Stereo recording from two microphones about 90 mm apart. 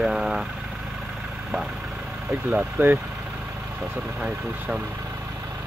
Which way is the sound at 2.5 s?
15° right (ahead or behind).